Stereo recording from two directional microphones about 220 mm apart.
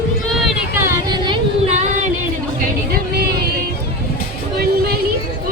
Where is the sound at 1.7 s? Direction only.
30° right (ahead or behind).